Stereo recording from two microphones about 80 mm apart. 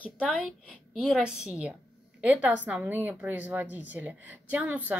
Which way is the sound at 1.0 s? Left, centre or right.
Centre.